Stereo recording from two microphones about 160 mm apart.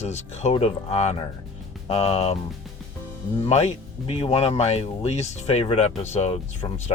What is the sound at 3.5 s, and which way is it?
Speech, 45° left (ahead or behind).